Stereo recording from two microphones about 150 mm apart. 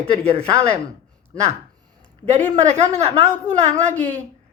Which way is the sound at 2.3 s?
50° right (ahead or behind).